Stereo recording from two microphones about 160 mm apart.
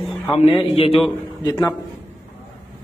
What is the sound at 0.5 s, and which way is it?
Speech, 40° left (ahead or behind).